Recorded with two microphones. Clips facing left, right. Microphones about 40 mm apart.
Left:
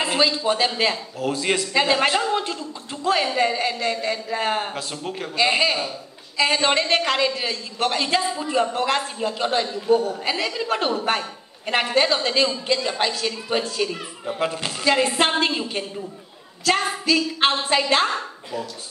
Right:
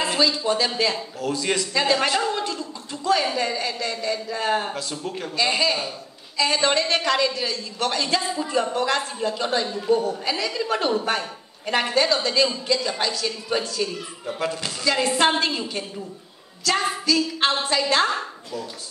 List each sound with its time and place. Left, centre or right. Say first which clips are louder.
0.0 s a man's voice: left 1 dB; left